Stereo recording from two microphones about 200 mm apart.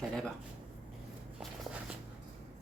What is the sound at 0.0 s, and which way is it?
Speech, centre (ahead or behind).